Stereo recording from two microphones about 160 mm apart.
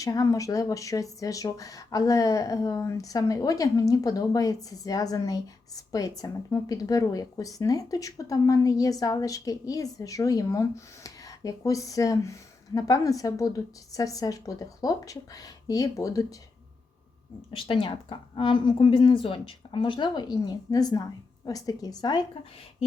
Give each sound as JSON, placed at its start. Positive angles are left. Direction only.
{"t": 0.0, "sound": "speech", "side_deg": 20}
{"t": 17.5, "sound": "speech", "side_deg": 35}